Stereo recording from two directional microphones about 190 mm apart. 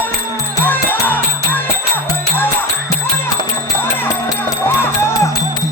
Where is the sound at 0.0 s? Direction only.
10° left (ahead or behind).